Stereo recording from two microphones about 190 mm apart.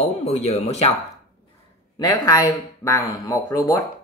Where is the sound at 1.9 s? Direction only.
20° left (ahead or behind).